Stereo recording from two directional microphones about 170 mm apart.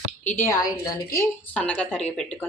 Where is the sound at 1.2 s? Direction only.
5° left (ahead or behind).